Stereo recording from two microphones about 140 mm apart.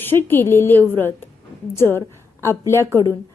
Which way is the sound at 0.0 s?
15° left (ahead or behind).